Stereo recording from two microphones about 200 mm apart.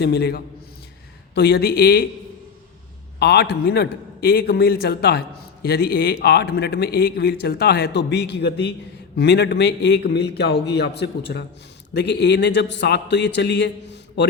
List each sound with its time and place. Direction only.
0.0 s a man's voice: 55° left (ahead or behind)
3.2 s a man's voice: 55° left (ahead or behind)